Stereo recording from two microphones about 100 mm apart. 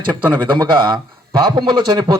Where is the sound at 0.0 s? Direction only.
45° right (ahead or behind).